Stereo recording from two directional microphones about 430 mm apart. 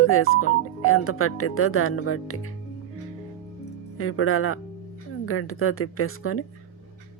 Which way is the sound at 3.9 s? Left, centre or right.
Left.